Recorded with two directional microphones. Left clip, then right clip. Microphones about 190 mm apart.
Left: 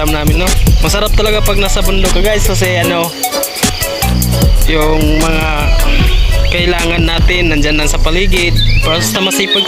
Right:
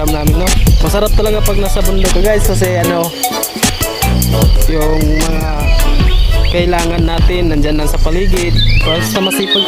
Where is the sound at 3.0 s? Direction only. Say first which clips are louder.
Left 1 dB; centre (ahead or behind).